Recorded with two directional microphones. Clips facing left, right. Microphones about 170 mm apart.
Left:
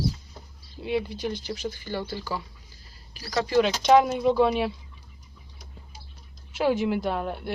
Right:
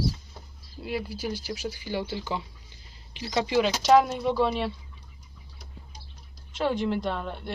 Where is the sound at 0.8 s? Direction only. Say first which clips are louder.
Left 4 dB; centre (ahead or behind); by 3.5 s 20° right (ahead or behind).